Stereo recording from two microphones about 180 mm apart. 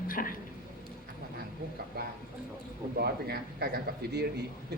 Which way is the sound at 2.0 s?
60° right (ahead or behind).